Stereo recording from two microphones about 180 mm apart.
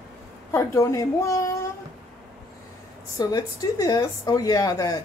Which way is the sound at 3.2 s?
20° left (ahead or behind).